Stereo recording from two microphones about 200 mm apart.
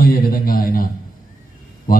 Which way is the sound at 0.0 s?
45° left (ahead or behind).